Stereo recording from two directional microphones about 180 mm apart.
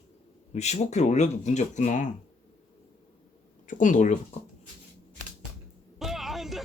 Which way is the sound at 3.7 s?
45° left (ahead or behind).